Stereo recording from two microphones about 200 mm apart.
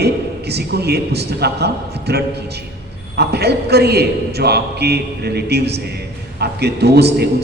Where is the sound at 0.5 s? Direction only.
55° right (ahead or behind).